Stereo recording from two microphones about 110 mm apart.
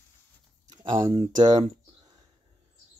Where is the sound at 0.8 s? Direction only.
45° right (ahead or behind).